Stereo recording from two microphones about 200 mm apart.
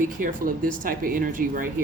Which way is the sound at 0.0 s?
45° right (ahead or behind).